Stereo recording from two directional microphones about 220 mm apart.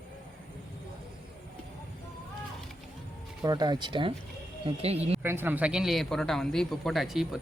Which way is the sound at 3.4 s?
20° right (ahead or behind).